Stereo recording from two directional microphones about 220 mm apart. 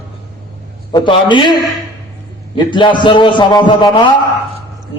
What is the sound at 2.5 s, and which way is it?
A man's voice, 20° left (ahead or behind).